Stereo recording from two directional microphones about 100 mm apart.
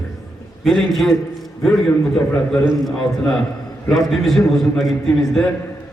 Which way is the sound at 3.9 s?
Centre (ahead or behind).